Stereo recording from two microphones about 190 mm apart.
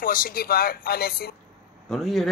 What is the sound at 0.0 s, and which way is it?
Speech, 50° left (ahead or behind).